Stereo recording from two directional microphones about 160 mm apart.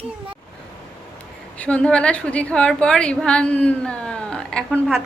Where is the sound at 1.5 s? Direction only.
10° left (ahead or behind).